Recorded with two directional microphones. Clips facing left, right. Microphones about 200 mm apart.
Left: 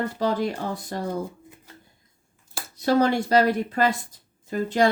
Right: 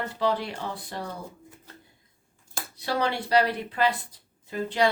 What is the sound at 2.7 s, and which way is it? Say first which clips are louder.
Speech: left 8 dB; 45° left (ahead or behind).